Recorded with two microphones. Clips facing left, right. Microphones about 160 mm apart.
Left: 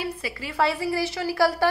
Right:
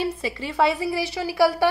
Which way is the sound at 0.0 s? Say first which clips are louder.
Right 4 dB; 25° right (ahead or behind).